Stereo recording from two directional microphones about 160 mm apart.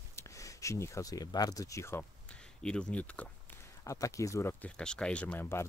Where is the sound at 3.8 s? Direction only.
20° left (ahead or behind).